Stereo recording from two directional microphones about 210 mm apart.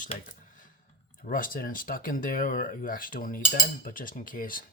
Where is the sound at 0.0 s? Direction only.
35° left (ahead or behind).